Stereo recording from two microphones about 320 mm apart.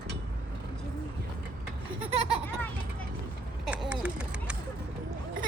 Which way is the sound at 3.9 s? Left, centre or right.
Centre.